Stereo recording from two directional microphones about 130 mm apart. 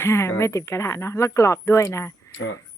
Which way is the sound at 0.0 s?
20° left (ahead or behind).